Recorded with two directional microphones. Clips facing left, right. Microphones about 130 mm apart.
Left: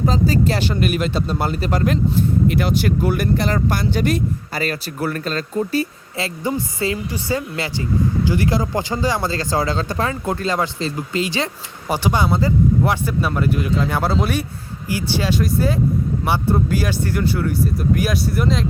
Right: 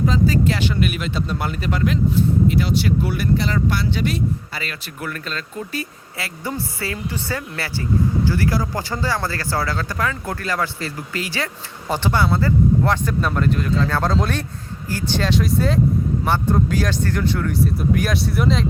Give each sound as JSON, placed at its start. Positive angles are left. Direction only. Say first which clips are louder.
{"t": 0.0, "sound": "speech", "louder": "even", "side_deg": 35}
{"t": 2.5, "sound": "speech", "louder": "left 1 dB", "side_deg": 55}